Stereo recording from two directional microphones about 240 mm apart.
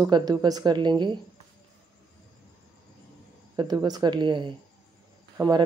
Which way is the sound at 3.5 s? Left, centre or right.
Centre.